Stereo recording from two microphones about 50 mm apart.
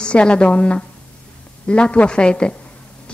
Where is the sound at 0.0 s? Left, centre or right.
Left.